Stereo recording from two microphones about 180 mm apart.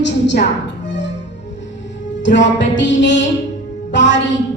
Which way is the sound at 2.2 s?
80° left.